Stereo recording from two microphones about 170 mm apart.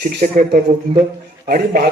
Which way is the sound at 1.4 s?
60° right (ahead or behind).